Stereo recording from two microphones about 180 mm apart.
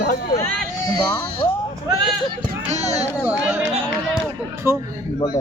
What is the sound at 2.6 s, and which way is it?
Speech, 40° right (ahead or behind).